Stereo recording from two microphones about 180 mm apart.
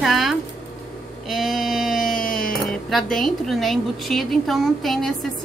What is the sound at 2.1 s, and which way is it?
Music, 50° left (ahead or behind).